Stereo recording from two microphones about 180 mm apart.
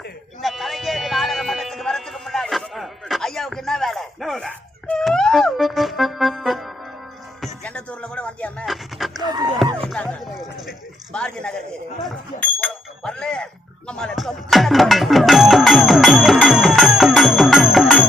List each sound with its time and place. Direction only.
0.4 s music: centre (ahead or behind)
9.2 s music: 20° right (ahead or behind)
9.8 s a sound: centre (ahead or behind)
12.0 s bicycle bell: 10° left (ahead or behind)